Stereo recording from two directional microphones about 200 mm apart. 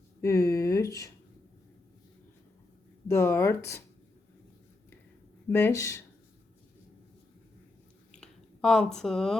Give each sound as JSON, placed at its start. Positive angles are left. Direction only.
{"t": 0.2, "sound": "speech", "side_deg": 15}
{"t": 3.1, "sound": "speech", "side_deg": 15}
{"t": 5.5, "sound": "speech", "side_deg": 10}
{"t": 8.1, "sound": "a sound", "side_deg": 5}